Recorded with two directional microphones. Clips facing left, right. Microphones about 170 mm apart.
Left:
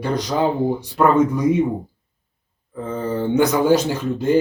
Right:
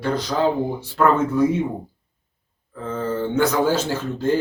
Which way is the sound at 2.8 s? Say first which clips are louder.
Left 2 dB; 15° left (ahead or behind).